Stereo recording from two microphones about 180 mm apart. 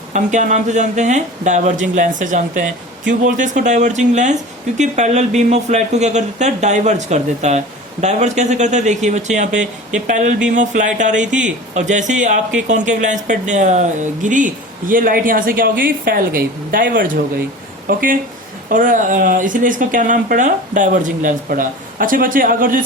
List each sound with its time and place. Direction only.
0.1 s speech: 40° right (ahead or behind)